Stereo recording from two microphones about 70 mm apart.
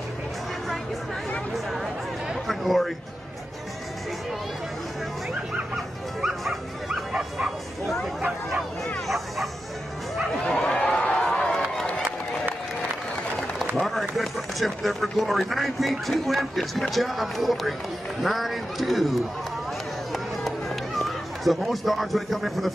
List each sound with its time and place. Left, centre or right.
2.2 s chatter: centre
6.2 s bow-wow: centre
9.0 s bow-wow: centre
10.4 s a sound: centre
11.2 s run: centre
13.7 s speech: centre
20.1 s run: centre